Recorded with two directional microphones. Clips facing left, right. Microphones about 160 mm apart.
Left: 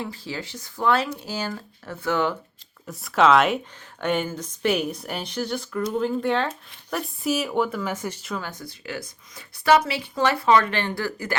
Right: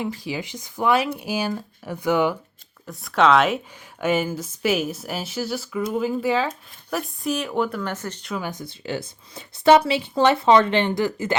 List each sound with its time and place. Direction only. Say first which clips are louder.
0.0 s speech: right 4 dB; 15° right (ahead or behind)
2.8 s speech: even; centre (ahead or behind)
8.4 s a woman's voice: right 4 dB; 20° right (ahead or behind)